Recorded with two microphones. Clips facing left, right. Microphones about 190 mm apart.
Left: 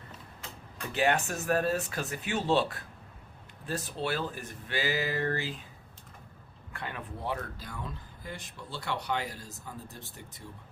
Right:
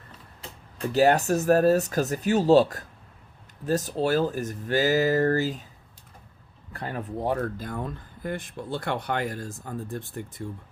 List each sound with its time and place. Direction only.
0.8 s speech: 40° right (ahead or behind)
6.7 s speech: 40° right (ahead or behind)